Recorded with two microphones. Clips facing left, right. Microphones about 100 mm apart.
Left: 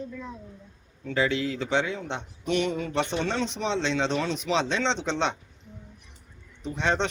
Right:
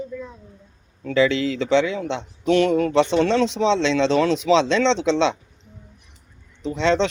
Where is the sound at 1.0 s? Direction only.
90° right.